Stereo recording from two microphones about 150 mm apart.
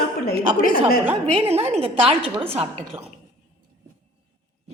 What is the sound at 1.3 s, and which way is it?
A woman's voice, 45° right (ahead or behind).